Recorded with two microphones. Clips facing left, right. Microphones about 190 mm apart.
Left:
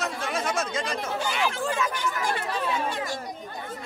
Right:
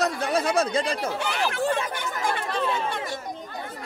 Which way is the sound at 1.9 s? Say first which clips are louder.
Even; 55° right (ahead or behind).